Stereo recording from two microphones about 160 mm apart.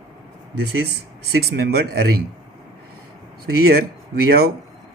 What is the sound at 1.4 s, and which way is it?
Speech, 80° right.